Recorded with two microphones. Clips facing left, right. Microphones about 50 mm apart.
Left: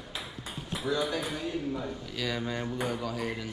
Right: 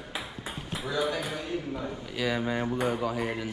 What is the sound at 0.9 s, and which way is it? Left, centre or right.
Speech, centre.